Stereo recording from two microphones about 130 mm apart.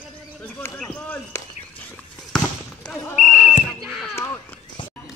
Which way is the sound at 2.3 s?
5° left (ahead or behind).